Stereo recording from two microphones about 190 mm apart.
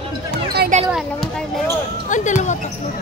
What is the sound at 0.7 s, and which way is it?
Basketball bounce, 40° right (ahead or behind).